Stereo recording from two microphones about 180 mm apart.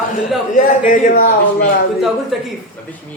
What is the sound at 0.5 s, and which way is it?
A man's voice, 45° left (ahead or behind).